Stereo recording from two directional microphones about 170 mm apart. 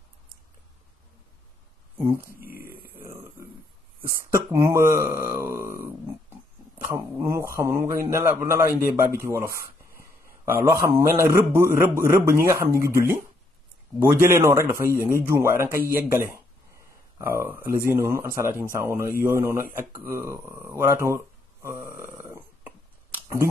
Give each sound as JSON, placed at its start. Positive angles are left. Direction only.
{"t": 2.0, "sound": "speech", "side_deg": -15}
{"t": 3.0, "sound": "grunt", "side_deg": -15}
{"t": 4.3, "sound": "speech", "side_deg": -15}
{"t": 6.9, "sound": "speech", "side_deg": -15}
{"t": 14.3, "sound": "a man's voice", "side_deg": -15}
{"t": 21.6, "sound": "a sound", "side_deg": -15}